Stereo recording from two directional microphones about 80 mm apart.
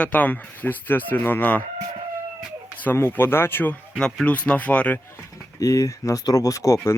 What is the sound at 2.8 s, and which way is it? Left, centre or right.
Speech, left.